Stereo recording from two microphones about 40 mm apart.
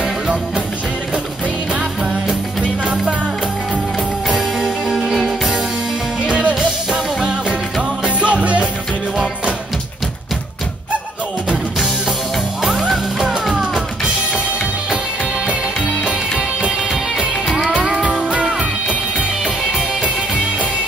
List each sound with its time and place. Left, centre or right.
4.3 s music: centre
6.2 s music: right
6.6 s music: centre
8.0 s music: right
12.8 s music: centre
16.0 s music: right
18.4 s music: right